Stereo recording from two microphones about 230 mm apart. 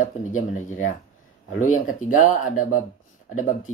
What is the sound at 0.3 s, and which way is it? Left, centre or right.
Speech, left.